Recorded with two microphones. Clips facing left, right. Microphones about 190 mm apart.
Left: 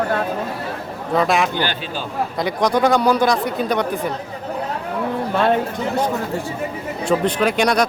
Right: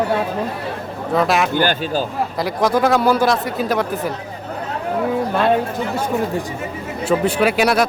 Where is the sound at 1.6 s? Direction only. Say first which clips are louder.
Right 6 dB; 45° right (ahead or behind).